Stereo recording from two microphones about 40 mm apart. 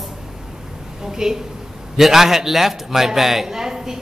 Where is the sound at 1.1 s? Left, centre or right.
Centre.